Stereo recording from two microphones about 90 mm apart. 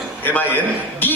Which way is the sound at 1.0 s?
20° left (ahead or behind).